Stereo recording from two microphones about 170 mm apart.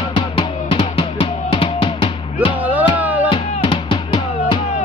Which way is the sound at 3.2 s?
30° left (ahead or behind).